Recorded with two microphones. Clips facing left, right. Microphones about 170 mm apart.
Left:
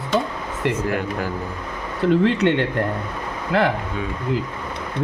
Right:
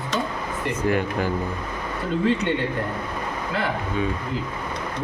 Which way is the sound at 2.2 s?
80° left.